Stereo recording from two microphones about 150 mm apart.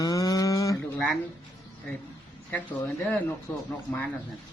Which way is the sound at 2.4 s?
10° left (ahead or behind).